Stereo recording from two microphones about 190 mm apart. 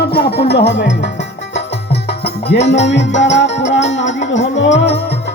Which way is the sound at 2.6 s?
70° left (ahead or behind).